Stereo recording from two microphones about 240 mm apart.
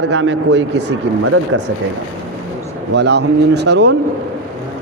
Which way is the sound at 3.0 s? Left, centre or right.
Right.